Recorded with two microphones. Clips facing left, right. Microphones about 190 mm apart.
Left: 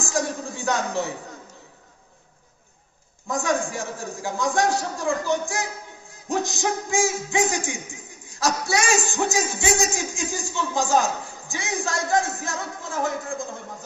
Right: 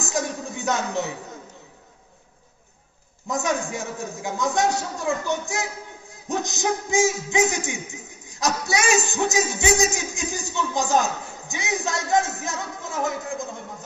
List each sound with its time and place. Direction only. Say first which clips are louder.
0.0 s a man's voice: left 1 dB; 20° right (ahead or behind)
3.3 s a man's voice: left 1 dB; 20° right (ahead or behind)